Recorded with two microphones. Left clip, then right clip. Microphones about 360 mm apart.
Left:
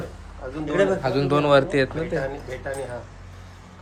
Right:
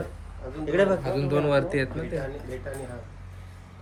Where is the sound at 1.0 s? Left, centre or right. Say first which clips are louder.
Left 5 dB; centre.